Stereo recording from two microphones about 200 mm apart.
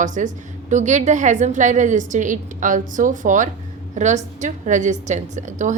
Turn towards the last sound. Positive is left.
turn(degrees=-35)  # may be behind; listen again after turning